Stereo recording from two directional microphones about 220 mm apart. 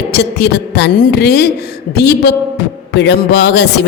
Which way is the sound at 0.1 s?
50° left (ahead or behind).